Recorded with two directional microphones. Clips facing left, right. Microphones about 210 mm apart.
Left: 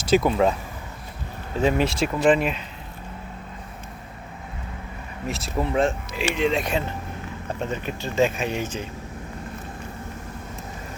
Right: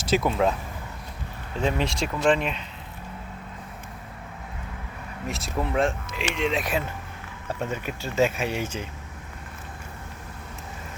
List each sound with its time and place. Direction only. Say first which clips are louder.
0.0 s speech: left 4 dB; centre (ahead or behind)
1.6 s speech: left 5 dB; 5° left (ahead or behind)
5.3 s speech: left 3 dB; centre (ahead or behind)